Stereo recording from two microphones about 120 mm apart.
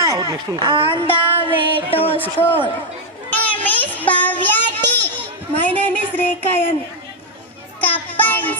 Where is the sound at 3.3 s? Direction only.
15° left (ahead or behind).